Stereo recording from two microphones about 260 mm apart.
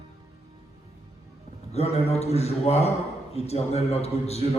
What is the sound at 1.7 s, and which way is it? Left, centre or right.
A man's voice, left.